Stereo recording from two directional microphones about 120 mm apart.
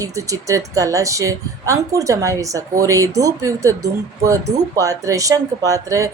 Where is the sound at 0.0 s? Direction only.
25° right (ahead or behind).